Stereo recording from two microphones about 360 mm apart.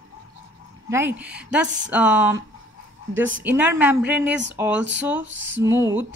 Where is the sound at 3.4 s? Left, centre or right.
Centre.